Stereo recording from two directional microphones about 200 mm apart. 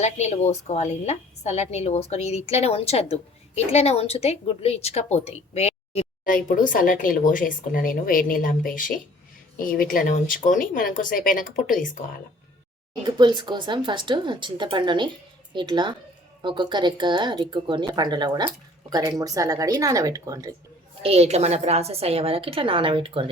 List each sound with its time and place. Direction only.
0.0 s a woman's voice: 35° left (ahead or behind)
6.2 s speech: 45° left (ahead or behind)
13.0 s speech: 20° right (ahead or behind)
21.0 s speech: 30° right (ahead or behind)